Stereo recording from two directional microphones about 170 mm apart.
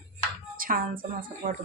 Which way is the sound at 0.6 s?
55° right (ahead or behind).